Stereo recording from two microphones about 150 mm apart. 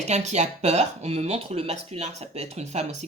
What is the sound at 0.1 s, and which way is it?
Speech, 50° right (ahead or behind).